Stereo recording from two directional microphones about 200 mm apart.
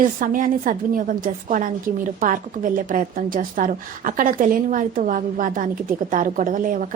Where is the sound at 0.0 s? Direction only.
40° right (ahead or behind).